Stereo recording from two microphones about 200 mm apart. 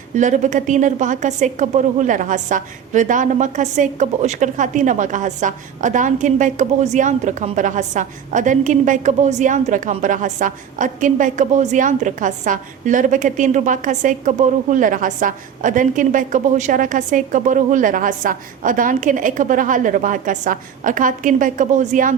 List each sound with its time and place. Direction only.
0.2 s a woman's voice: 40° right (ahead or behind)